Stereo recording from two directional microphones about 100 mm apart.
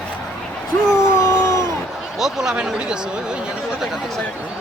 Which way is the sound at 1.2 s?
35° left (ahead or behind).